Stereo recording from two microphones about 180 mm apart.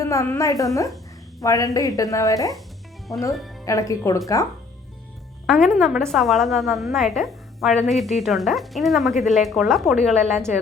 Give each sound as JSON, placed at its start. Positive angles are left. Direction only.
{"t": 0.0, "sound": "a woman's voice", "side_deg": 15}
{"t": 3.3, "sound": "speech", "side_deg": 0}
{"t": 3.7, "sound": "a woman's voice", "side_deg": 15}
{"t": 5.5, "sound": "a woman's voice", "side_deg": 5}